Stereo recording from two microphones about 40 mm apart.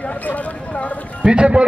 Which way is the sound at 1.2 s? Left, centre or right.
Right.